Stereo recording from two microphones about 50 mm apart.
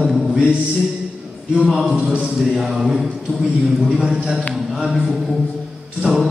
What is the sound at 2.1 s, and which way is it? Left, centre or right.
Mantra, centre.